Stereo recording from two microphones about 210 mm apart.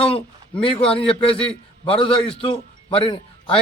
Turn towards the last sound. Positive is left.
turn(degrees=25)  # may be behind; listen again after turning